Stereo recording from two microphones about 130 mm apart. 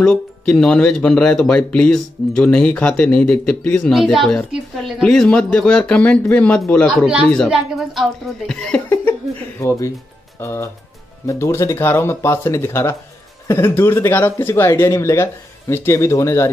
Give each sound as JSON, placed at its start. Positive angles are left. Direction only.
{"t": 0.0, "sound": "speech", "side_deg": 5}
{"t": 3.9, "sound": "speech", "side_deg": 0}
{"t": 5.0, "sound": "speech", "side_deg": 5}
{"t": 7.4, "sound": "speech", "side_deg": -5}
{"t": 9.6, "sound": "speech", "side_deg": 25}